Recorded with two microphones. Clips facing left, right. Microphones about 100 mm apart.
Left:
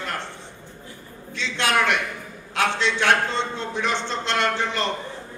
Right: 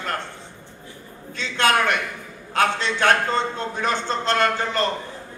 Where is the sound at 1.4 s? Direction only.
45° right (ahead or behind).